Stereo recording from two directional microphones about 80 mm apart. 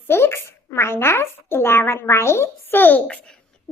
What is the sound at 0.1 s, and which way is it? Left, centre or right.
A woman's voice, left.